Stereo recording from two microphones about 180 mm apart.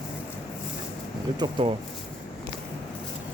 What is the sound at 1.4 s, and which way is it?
Speech, 25° right (ahead or behind).